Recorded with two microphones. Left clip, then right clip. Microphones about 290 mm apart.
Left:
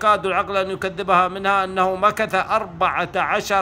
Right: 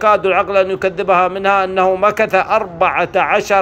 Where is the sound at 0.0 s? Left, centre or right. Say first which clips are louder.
Right 6 dB; centre.